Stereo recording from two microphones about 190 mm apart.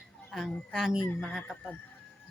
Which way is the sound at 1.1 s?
10° left (ahead or behind).